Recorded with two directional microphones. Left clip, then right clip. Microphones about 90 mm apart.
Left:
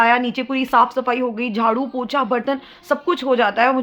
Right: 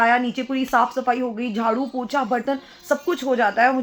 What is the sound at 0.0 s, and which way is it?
A woman's voice, 30° left (ahead or behind).